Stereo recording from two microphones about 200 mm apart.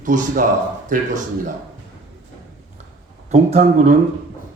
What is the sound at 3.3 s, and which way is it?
Speech, 35° right (ahead or behind).